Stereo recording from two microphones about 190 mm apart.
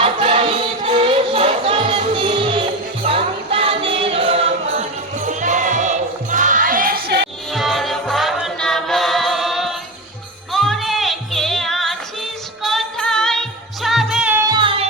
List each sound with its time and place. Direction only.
0.0 s music: 30° right (ahead or behind); by 7.3 s 55° right (ahead or behind)
7.5 s music: centre (ahead or behind); by 14.8 s 25° right (ahead or behind)